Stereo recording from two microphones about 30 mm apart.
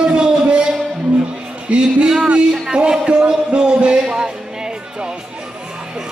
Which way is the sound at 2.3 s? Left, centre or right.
Right.